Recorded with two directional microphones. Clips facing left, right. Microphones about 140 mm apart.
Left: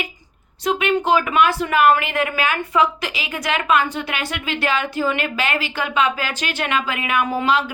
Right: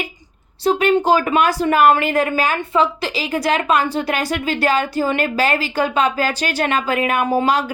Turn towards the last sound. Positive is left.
turn(degrees=-40)  # may be behind; listen again after turning